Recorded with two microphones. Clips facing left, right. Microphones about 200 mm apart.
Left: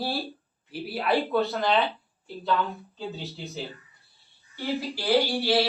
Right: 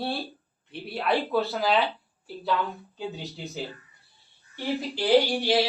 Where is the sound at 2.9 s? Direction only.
15° right (ahead or behind).